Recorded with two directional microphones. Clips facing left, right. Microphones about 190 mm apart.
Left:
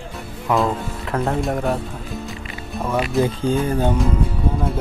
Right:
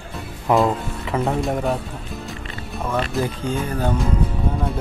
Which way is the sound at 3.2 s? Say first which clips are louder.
Left 5 dB; 30° left (ahead or behind).